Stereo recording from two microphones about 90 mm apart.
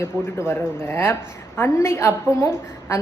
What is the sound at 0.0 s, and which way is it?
A woman's voice, 30° left (ahead or behind).